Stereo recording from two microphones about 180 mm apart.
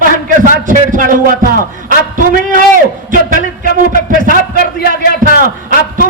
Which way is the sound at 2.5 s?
45° right (ahead or behind).